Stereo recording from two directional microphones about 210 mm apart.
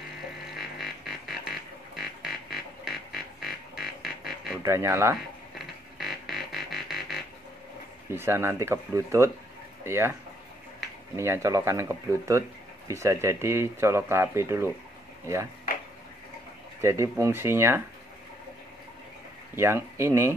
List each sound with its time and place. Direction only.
0.6 s music: centre (ahead or behind)
4.6 s speech: 15° right (ahead or behind)
5.5 s music: centre (ahead or behind)
8.1 s speech: 10° right (ahead or behind)
11.1 s speech: 15° right (ahead or behind)
16.8 s speech: 15° right (ahead or behind)
19.5 s speech: 10° right (ahead or behind)